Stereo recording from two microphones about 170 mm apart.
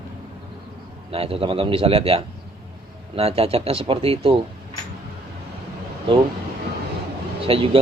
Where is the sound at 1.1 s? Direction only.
35° right (ahead or behind).